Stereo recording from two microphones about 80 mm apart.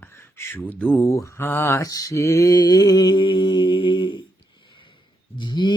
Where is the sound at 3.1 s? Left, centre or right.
Left.